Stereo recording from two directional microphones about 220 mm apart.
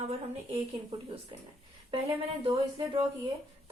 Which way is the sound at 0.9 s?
20° right (ahead or behind).